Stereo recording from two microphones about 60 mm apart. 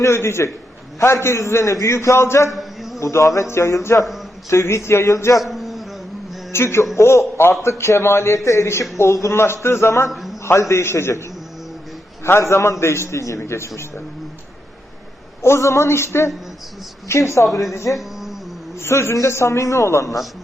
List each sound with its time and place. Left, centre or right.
0.0 s a man's voice: left
2.5 s a sound: centre
3.0 s a man's voice: left
5.4 s a sound: centre
6.5 s a man's voice: left
10.1 s a man's voice: centre
10.4 s a man's voice: left
12.2 s a man's voice: left
15.4 s a man's voice: left
17.1 s a man's voice: left
17.5 s speech: centre
17.9 s a sound: centre
18.8 s a man's voice: left